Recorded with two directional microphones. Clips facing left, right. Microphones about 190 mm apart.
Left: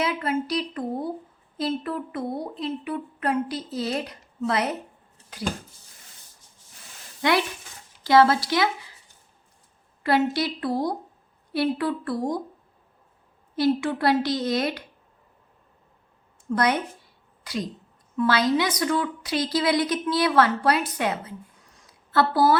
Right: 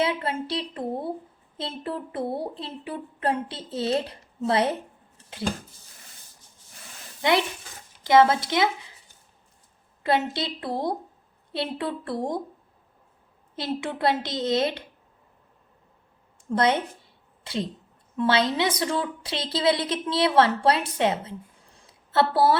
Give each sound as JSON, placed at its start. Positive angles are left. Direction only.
{"t": 0.0, "sound": "speech", "side_deg": -30}
{"t": 7.2, "sound": "speech", "side_deg": -20}
{"t": 10.0, "sound": "speech", "side_deg": -25}
{"t": 13.6, "sound": "speech", "side_deg": -20}
{"t": 16.5, "sound": "speech", "side_deg": -25}